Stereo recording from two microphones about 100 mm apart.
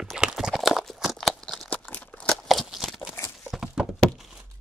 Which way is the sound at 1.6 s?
15° left (ahead or behind).